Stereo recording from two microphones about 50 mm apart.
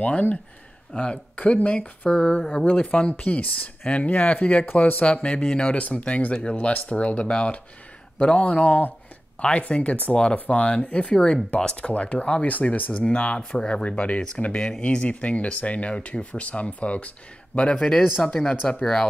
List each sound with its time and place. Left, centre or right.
0.0 s speech: left
5.8 s speech: left
14.4 s speech: centre
17.6 s speech: centre